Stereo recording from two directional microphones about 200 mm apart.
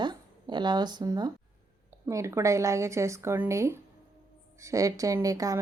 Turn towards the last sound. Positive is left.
turn(degrees=-15)  # may be behind; listen again after turning